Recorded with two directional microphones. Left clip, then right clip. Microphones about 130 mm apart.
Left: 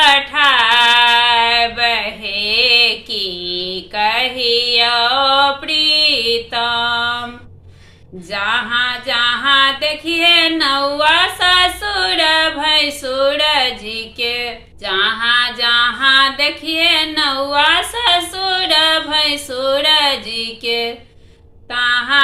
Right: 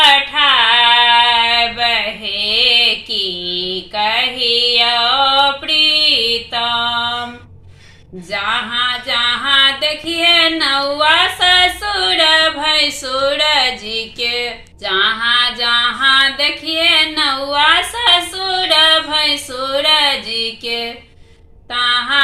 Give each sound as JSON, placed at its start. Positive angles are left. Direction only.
{"t": 0.0, "sound": "female singing", "side_deg": 0}
{"t": 2.2, "sound": "a sound", "side_deg": 5}
{"t": 6.1, "sound": "mantra", "side_deg": 5}
{"t": 6.7, "sound": "a sound", "side_deg": 5}
{"t": 8.3, "sound": "music", "side_deg": 5}
{"t": 10.3, "sound": "female singing", "side_deg": 5}
{"t": 10.8, "sound": "a sound", "side_deg": 5}
{"t": 18.0, "sound": "female singing", "side_deg": 10}
{"t": 21.7, "sound": "music", "side_deg": 10}